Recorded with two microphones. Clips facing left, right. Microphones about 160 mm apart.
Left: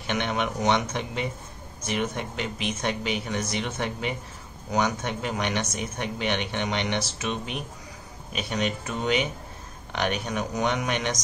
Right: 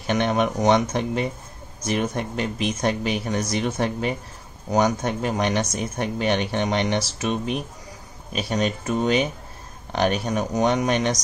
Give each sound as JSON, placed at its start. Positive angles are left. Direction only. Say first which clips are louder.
{"t": 0.0, "sound": "speech", "louder": "right 6 dB", "side_deg": -40}